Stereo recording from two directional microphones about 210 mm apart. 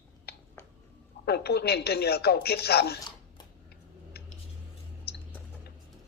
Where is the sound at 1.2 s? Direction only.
50° left (ahead or behind).